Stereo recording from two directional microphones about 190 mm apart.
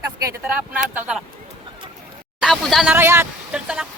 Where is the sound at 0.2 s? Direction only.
15° right (ahead or behind).